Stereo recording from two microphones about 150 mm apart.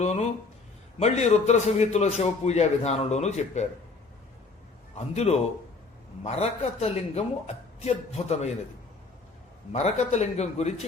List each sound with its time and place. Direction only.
0.0 s a man's voice: 45° left (ahead or behind)
4.9 s a man's voice: 45° left (ahead or behind)
9.7 s a man's voice: 50° left (ahead or behind)